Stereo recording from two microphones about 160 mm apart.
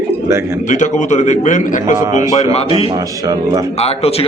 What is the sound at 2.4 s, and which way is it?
Speech, 40° left (ahead or behind).